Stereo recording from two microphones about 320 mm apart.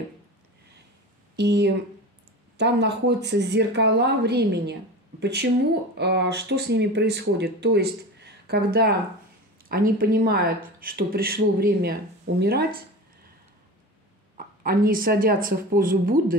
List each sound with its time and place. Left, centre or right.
1.3 s speech: right
14.3 s speech: right